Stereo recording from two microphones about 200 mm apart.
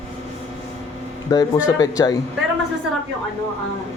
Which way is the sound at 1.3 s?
20° left (ahead or behind).